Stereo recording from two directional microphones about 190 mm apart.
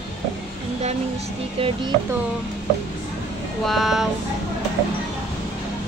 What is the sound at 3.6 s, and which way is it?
Speech, centre (ahead or behind).